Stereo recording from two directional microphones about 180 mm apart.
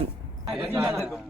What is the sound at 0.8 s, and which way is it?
Speech, 5° right (ahead or behind).